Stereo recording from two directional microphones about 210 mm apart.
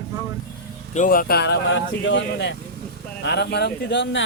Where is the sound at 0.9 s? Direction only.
40° left (ahead or behind).